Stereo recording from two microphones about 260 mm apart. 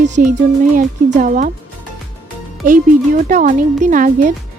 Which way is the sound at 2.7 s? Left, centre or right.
Right.